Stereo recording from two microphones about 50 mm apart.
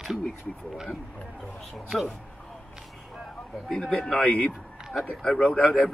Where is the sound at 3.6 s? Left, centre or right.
Centre.